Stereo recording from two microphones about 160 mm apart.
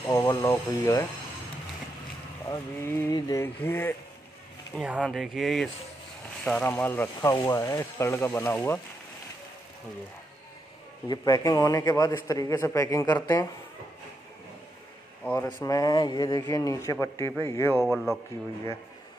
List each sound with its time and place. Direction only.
0.0 s a man's voice: 20° left (ahead or behind)
2.4 s a man's voice: 20° left (ahead or behind)
4.7 s speech: 10° right (ahead or behind); by 8.8 s 15° left (ahead or behind)
11.1 s a man's voice: 25° left (ahead or behind)
15.2 s a man's voice: 10° left (ahead or behind)
17.8 s speech: 5° right (ahead or behind)